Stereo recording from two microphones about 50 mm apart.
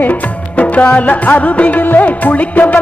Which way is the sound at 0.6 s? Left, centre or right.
Left.